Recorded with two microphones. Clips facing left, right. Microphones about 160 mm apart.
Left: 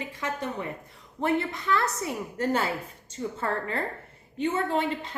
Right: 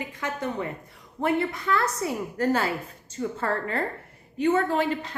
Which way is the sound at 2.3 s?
25° left (ahead or behind).